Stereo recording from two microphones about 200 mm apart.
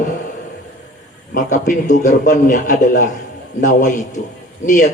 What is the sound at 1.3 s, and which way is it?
A man's voice, 40° left (ahead or behind).